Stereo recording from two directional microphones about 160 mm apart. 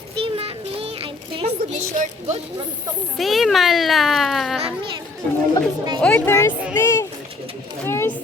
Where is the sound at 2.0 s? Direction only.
45° right (ahead or behind).